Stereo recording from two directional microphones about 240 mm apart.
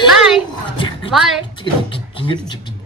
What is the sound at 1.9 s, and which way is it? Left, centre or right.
Speech, left.